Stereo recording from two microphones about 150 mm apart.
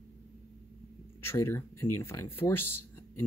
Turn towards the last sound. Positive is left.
turn(degrees=15)  # may be behind; listen again after turning